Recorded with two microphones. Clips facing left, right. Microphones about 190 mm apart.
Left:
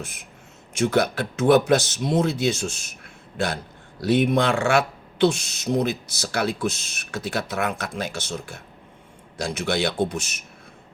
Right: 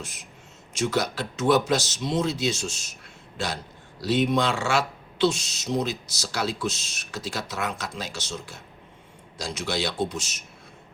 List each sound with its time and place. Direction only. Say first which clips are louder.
0.0 s speech: left 3 dB; 55° left (ahead or behind)